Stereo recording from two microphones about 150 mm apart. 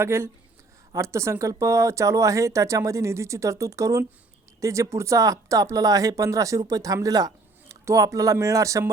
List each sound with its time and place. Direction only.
0.0 s speech: 15° right (ahead or behind)